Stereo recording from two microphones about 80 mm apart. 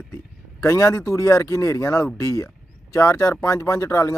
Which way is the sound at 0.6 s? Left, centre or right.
Left.